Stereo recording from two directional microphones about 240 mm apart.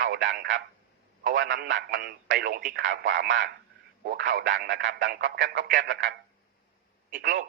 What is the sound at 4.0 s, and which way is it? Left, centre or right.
Speech, right.